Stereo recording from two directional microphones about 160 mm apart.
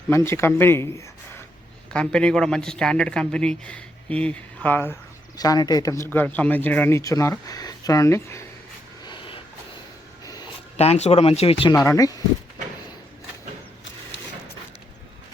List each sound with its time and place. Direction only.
0.1 s speech: 15° left (ahead or behind)
1.9 s speech: 5° left (ahead or behind)
5.4 s speech: 25° left (ahead or behind)
9.0 s vehicle: 30° left (ahead or behind)
10.8 s speech: 40° left (ahead or behind)
11.7 s speech: 20° left (ahead or behind)